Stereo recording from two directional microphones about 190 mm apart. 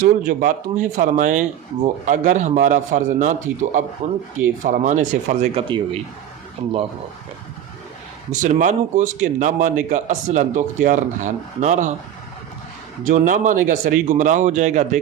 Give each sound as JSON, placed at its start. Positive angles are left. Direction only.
{"t": 0.0, "sound": "speech", "side_deg": -45}
{"t": 5.6, "sound": "a man's voice", "side_deg": -25}
{"t": 8.3, "sound": "speech", "side_deg": -40}
{"t": 13.1, "sound": "speech", "side_deg": -45}